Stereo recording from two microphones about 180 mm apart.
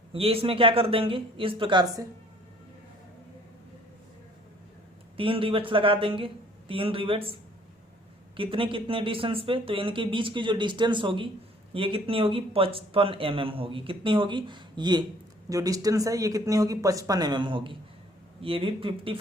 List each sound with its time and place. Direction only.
0.1 s a man's voice: 30° right (ahead or behind)
5.1 s speech: 30° right (ahead or behind)
8.4 s speech: 30° right (ahead or behind)